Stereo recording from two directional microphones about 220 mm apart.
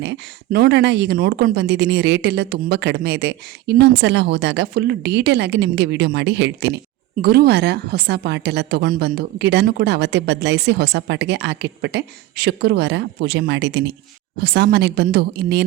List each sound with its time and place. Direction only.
0.0 s speech: 50° right (ahead or behind)